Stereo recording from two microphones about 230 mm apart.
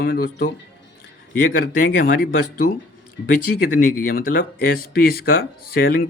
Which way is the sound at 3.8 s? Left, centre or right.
Left.